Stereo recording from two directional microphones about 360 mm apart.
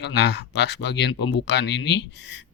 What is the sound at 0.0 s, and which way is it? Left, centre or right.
Speech, left.